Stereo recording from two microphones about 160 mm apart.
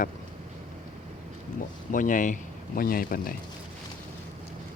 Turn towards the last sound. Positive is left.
turn(degrees=65)  # may be behind; listen again after turning